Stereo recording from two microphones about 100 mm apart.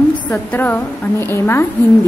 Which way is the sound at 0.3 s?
15° left (ahead or behind).